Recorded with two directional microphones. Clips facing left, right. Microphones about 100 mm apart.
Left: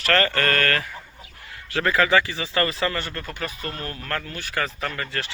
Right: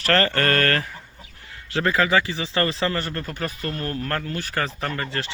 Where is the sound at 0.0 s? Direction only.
35° right (ahead or behind).